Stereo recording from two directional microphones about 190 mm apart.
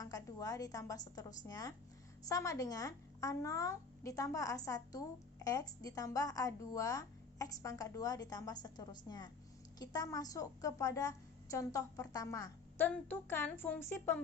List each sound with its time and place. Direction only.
0.0 s a woman's voice: 20° left (ahead or behind)